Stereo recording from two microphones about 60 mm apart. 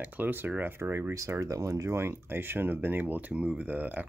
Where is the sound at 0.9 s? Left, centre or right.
Right.